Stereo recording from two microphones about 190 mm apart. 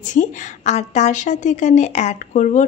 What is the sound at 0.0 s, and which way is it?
A woman's voice, 40° left (ahead or behind).